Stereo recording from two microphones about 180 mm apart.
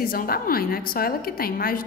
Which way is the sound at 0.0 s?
55° left (ahead or behind).